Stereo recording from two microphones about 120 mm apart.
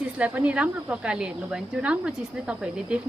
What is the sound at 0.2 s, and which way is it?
A woman's voice, 10° right (ahead or behind).